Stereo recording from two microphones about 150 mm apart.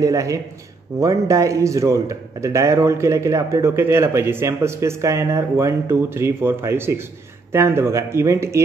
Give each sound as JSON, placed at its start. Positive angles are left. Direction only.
{"t": 0.0, "sound": "a man's voice", "side_deg": -20}